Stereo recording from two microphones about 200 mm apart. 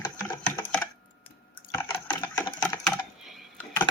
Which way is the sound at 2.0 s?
20° left (ahead or behind).